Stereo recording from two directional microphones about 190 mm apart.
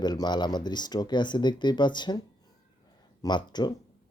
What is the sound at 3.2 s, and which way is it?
Speech, 25° left (ahead or behind).